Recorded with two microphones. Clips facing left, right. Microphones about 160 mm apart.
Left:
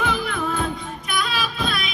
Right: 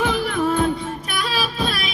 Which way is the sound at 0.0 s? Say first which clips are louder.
Right 4 dB; 45° right (ahead or behind).